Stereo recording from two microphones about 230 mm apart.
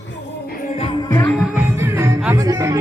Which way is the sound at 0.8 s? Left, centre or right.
Centre.